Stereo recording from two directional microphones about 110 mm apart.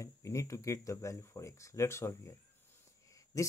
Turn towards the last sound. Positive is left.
turn(degrees=30)  # may be behind; listen again after turning